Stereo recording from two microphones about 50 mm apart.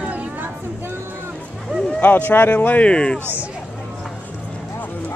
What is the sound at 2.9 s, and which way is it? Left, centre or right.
Speech, centre.